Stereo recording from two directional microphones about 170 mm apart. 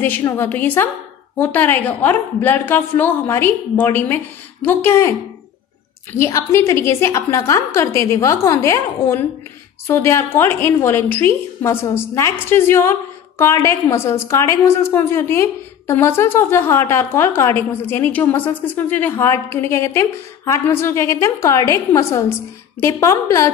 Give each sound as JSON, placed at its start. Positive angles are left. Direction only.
{"t": 0.0, "sound": "a woman's voice", "side_deg": 10}
{"t": 6.1, "sound": "a woman's voice", "side_deg": 15}